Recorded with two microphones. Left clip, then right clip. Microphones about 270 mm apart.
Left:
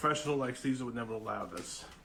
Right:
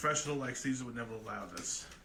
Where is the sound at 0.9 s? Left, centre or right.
Left.